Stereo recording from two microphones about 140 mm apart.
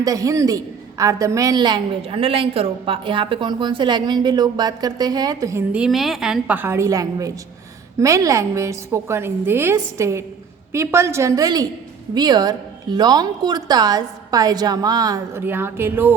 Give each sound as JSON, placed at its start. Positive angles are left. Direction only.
{"t": 0.0, "sound": "a woman's voice", "side_deg": -25}
{"t": 5.7, "sound": "a woman's voice", "side_deg": -5}
{"t": 15.4, "sound": "a woman's voice", "side_deg": -15}